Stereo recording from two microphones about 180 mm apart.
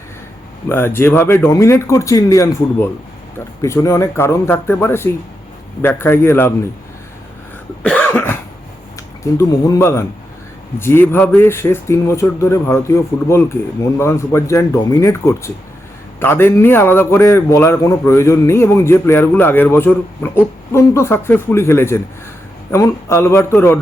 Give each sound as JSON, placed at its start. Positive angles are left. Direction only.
{"t": 0.7, "sound": "a man's voice", "side_deg": 10}
{"t": 7.8, "sound": "cough", "side_deg": 10}
{"t": 9.2, "sound": "a man's voice", "side_deg": 20}